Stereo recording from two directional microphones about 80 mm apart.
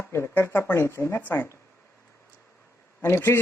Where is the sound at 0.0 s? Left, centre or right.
Left.